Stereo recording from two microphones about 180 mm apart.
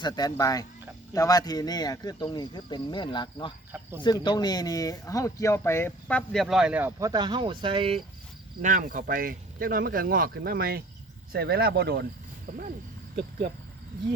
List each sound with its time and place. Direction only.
0.0 s speech: 20° left (ahead or behind); by 7.1 s 10° right (ahead or behind)
7.1 s speech: 25° right (ahead or behind)
8.6 s speech: 50° right (ahead or behind); by 12.0 s 65° right (ahead or behind)